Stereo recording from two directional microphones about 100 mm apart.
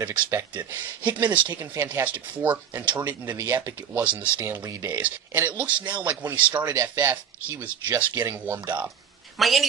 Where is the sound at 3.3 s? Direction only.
30° right (ahead or behind).